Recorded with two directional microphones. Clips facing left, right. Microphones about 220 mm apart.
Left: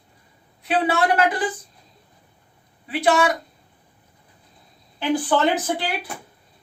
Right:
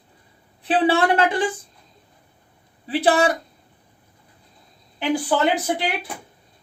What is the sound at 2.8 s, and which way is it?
Speech, 35° right (ahead or behind).